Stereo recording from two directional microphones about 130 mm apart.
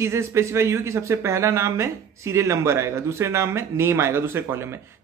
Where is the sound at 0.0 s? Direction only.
20° right (ahead or behind).